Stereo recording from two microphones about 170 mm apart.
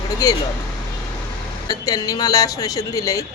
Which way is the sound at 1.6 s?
20° left (ahead or behind).